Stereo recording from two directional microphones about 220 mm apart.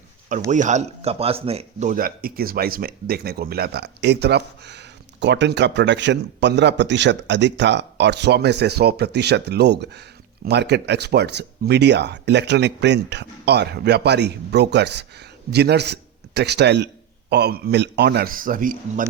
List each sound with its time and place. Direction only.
0.5 s speech: 35° right (ahead or behind)